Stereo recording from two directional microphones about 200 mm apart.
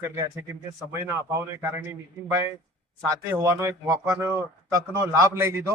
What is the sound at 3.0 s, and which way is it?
Speech, 15° right (ahead or behind).